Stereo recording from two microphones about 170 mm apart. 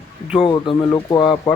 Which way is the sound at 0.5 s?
25° left (ahead or behind).